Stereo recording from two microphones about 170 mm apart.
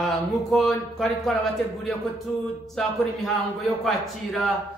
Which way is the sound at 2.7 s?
Centre (ahead or behind).